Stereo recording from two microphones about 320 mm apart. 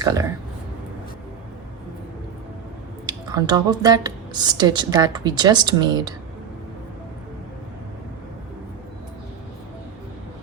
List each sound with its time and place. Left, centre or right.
0.0 s speech: centre
3.1 s speech: centre